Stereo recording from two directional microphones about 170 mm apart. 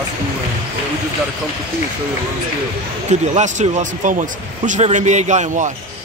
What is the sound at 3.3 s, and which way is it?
Speech, 45° right (ahead or behind).